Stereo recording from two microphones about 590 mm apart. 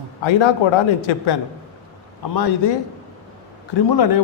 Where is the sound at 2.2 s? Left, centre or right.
Left.